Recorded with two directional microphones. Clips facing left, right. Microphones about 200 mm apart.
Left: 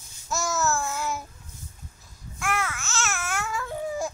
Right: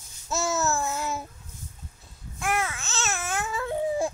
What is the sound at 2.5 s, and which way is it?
Babbling, 15° right (ahead or behind).